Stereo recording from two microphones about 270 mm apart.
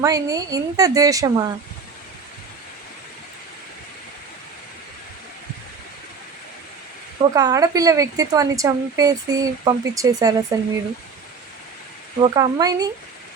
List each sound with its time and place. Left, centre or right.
0.0 s speech: centre
7.2 s speech: centre
12.2 s speech: centre